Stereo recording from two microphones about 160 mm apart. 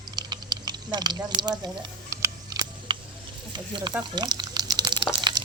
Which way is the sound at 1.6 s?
25° right (ahead or behind).